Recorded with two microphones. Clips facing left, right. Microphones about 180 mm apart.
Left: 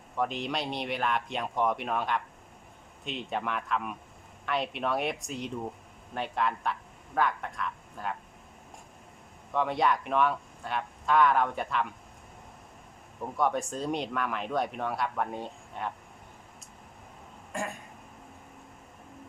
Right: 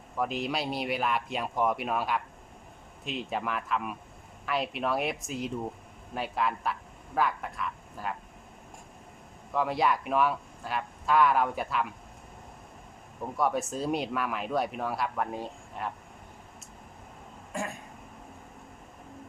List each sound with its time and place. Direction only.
0.2 s speech: 5° right (ahead or behind)
9.5 s speech: 5° right (ahead or behind)
13.3 s speech: 5° right (ahead or behind)
17.5 s speech: centre (ahead or behind)